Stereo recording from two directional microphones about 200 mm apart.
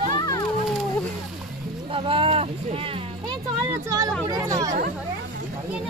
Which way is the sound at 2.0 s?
25° right (ahead or behind).